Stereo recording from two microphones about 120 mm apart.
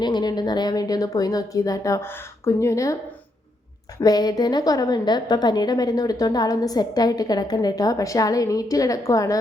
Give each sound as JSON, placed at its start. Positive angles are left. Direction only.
{"t": 0.0, "sound": "a woman's voice", "side_deg": 35}
{"t": 4.0, "sound": "a woman's voice", "side_deg": 35}